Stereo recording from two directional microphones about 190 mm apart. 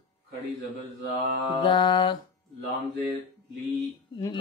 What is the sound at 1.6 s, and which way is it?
Mantra, 25° left (ahead or behind).